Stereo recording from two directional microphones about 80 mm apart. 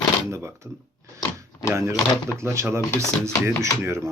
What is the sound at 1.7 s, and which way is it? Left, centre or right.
Speech, right.